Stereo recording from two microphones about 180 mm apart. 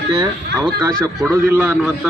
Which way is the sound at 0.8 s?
15° right (ahead or behind).